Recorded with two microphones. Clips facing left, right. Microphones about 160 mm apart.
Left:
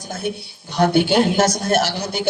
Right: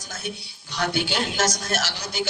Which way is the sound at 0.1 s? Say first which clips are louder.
Left 8 dB; 55° left (ahead or behind).